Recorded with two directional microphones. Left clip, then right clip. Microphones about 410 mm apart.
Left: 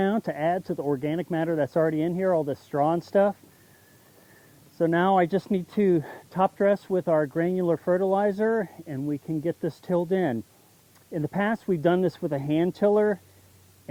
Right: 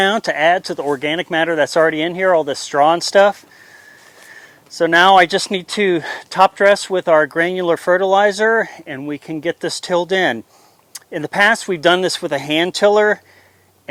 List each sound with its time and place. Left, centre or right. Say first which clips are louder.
0.0 s speech: right 12 dB; centre
4.8 s speech: right 12 dB; centre
9.1 s speech: right 5 dB; right
9.4 s speech: right 9 dB; centre